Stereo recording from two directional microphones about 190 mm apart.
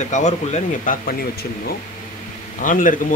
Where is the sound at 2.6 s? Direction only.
45° left (ahead or behind).